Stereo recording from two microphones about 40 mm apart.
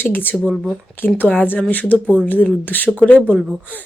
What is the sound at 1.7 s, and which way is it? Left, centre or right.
Speech, left.